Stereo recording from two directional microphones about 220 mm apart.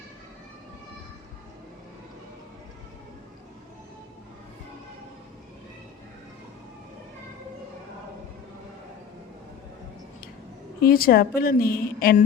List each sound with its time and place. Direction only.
10.8 s a woman's voice: 40° left (ahead or behind)